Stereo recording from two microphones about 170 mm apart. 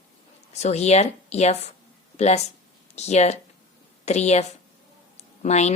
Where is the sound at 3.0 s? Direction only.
40° left (ahead or behind).